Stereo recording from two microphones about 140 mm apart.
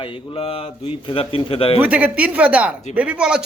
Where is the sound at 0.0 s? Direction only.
45° left (ahead or behind).